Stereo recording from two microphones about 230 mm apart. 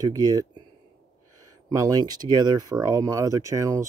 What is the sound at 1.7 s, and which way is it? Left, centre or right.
Speech, centre.